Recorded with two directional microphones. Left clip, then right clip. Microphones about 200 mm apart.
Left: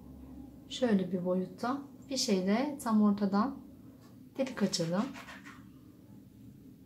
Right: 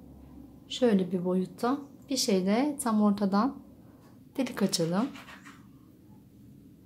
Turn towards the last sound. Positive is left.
turn(degrees=-40)  # may be behind; listen again after turning